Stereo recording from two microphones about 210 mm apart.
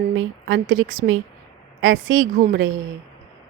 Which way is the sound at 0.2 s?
75° right (ahead or behind).